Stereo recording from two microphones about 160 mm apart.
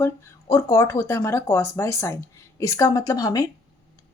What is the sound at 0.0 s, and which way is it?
A woman's voice, 20° left (ahead or behind).